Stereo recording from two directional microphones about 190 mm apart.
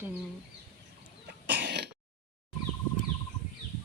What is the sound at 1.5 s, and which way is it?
Throat clearing, 65° right (ahead or behind).